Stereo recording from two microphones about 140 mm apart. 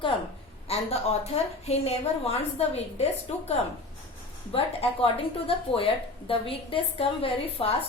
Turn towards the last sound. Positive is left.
turn(degrees=45)  # may be behind; listen again after turning